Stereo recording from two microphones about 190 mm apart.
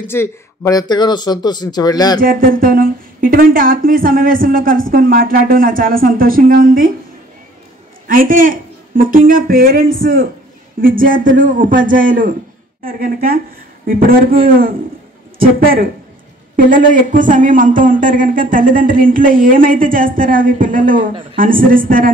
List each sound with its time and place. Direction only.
0.0 s speech: 10° left (ahead or behind)
2.1 s a man's voice: 50° right (ahead or behind)
8.1 s a man's voice: 45° right (ahead or behind)
14.5 s a man's voice: 50° right (ahead or behind)